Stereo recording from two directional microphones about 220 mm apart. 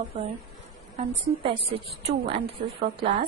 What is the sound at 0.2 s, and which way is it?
A woman's voice, 30° right (ahead or behind).